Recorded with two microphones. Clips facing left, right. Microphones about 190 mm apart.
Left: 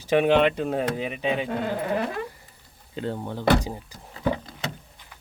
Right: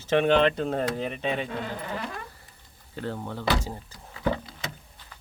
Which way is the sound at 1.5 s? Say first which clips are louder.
Left 7 dB; 55° left (ahead or behind).